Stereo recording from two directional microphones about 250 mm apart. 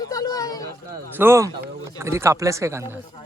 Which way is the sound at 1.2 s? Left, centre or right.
Centre.